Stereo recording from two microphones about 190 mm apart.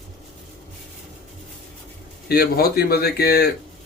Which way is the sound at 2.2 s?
55° left (ahead or behind).